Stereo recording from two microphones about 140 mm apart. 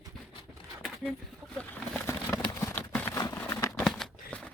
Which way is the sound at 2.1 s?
20° left (ahead or behind).